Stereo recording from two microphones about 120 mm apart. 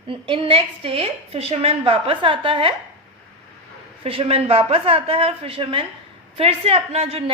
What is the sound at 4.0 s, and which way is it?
A woman's voice, 55° right (ahead or behind).